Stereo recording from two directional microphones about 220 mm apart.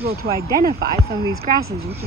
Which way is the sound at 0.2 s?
45° right (ahead or behind).